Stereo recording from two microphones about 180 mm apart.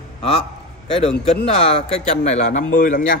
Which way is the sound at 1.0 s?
35° left (ahead or behind).